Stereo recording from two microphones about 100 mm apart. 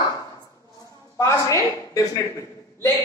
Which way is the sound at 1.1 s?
30° left (ahead or behind).